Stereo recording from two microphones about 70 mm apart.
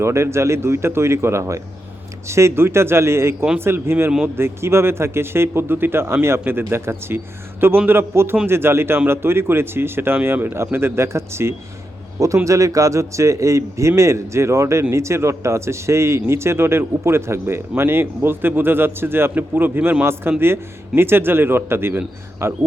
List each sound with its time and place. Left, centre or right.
0.0 s a man's voice: right
12.5 s a man's voice: right